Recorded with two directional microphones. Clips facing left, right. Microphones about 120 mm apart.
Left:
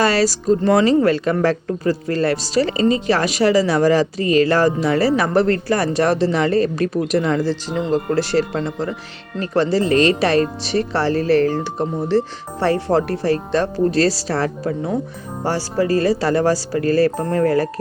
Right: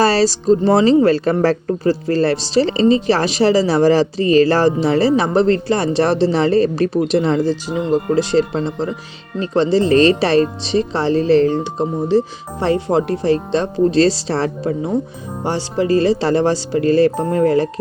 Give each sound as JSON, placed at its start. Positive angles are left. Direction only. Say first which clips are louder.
{"t": 0.0, "sound": "speech", "louder": "right 3 dB", "side_deg": -30}
{"t": 7.9, "sound": "speech", "louder": "right 3 dB", "side_deg": -15}